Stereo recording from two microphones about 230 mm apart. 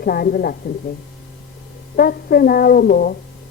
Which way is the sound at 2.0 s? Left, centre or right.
Left.